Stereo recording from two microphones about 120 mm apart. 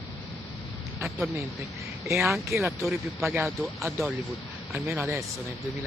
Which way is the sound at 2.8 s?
Centre (ahead or behind).